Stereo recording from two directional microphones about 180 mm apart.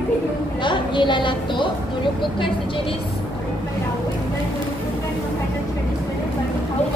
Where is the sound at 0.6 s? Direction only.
25° left (ahead or behind).